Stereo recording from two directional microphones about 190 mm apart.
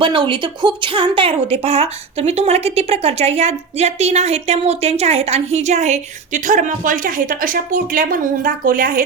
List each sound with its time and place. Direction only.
0.0 s a woman's voice: 25° right (ahead or behind); by 9.0 s 50° right (ahead or behind)